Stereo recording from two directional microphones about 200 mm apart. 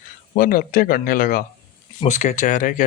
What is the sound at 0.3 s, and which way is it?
Speech, 45° left (ahead or behind).